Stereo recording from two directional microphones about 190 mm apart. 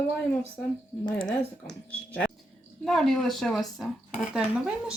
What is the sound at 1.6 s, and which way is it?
A woman's voice, 5° left (ahead or behind).